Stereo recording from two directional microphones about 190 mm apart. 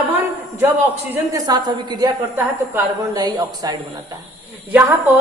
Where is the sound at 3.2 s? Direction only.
20° right (ahead or behind).